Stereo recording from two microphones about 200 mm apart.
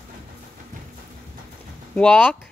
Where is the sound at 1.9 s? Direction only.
5° left (ahead or behind).